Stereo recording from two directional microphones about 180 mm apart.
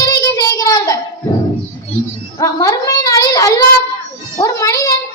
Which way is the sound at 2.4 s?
20° left (ahead or behind).